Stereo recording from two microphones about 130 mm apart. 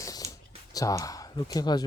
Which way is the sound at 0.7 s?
25° left (ahead or behind).